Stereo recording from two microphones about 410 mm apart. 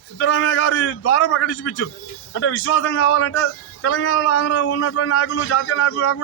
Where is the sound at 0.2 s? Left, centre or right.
Left.